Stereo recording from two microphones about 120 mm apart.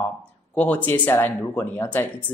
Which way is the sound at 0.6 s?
15° left (ahead or behind).